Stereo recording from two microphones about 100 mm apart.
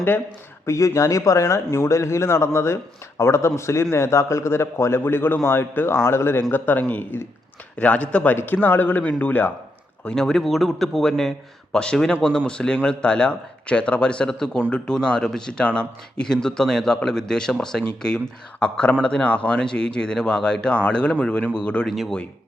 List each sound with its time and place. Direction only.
0.6 s a man's voice: 30° left (ahead or behind)
10.0 s a man's voice: 5° left (ahead or behind)